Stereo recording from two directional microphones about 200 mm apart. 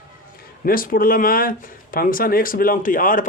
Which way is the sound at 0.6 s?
45° left (ahead or behind).